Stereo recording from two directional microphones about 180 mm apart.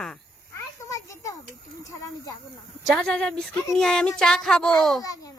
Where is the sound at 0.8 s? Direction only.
20° left (ahead or behind).